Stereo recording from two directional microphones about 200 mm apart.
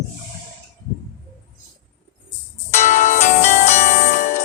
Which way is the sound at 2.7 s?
40° left (ahead or behind).